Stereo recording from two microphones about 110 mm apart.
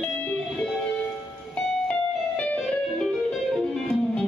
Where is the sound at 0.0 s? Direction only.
10° left (ahead or behind).